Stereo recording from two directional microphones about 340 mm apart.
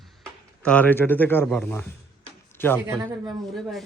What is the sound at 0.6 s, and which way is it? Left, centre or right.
A man's voice, centre.